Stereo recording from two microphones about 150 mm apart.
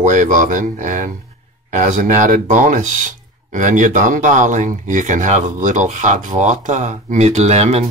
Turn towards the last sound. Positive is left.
turn(degrees=-45)  # may be behind; listen again after turning